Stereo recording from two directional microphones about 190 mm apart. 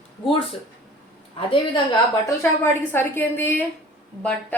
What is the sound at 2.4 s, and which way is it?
A woman's voice, 10° left (ahead or behind).